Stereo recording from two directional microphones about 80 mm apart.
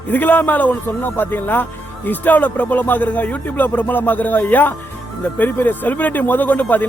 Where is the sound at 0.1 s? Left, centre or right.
Left.